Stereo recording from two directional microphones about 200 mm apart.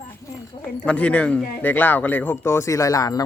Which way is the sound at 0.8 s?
5° left (ahead or behind).